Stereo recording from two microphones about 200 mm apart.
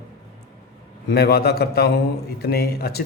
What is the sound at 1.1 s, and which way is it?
Speech, 50° left (ahead or behind).